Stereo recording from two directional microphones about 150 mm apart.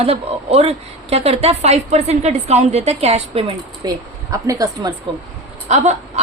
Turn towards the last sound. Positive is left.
turn(degrees=-50)  # may be behind; listen again after turning